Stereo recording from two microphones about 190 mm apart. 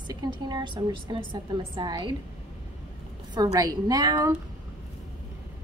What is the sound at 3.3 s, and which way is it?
A woman's voice, 20° right (ahead or behind).